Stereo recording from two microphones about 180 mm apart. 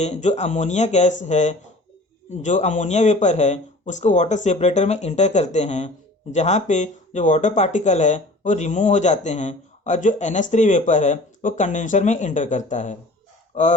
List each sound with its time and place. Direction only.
0.0 s speech: 40° left (ahead or behind)